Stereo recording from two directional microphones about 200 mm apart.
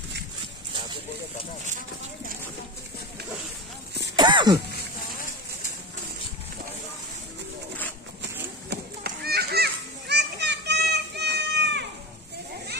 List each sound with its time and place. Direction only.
4.2 s cough: 20° right (ahead or behind)
8.2 s children playing: 55° right (ahead or behind)